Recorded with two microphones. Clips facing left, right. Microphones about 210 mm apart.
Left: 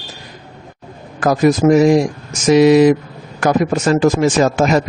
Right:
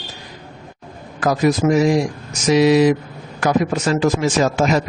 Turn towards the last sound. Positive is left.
turn(degrees=50)  # may be behind; listen again after turning